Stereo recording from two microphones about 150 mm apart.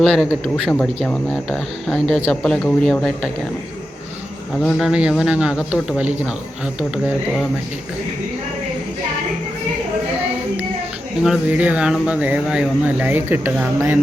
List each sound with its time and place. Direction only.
0.0 s speech: centre (ahead or behind)
4.8 s speech: 5° right (ahead or behind)
11.2 s speech: 5° right (ahead or behind)